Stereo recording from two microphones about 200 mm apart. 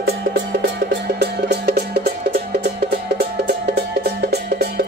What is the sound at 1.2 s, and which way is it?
Music, 55° right (ahead or behind).